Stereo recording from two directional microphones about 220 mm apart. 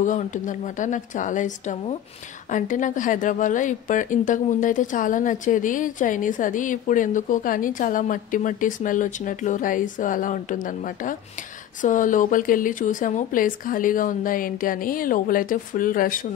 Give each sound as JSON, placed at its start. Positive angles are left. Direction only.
{"t": 0.0, "sound": "a woman's voice", "side_deg": 35}